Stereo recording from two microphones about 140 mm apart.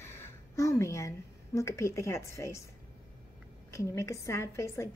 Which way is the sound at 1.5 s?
20° left (ahead or behind).